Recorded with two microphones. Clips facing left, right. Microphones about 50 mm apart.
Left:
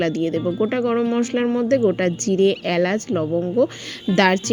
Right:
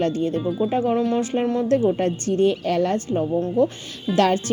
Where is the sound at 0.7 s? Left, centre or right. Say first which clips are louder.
Left 1 dB; left.